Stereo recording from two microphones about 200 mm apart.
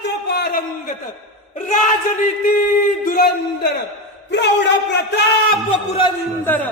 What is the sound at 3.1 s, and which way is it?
Speech, 50° left (ahead or behind).